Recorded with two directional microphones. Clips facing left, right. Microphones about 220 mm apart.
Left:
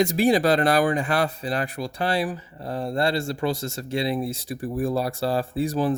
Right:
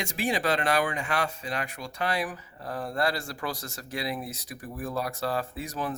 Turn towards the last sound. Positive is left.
turn(degrees=30)  # may be behind; listen again after turning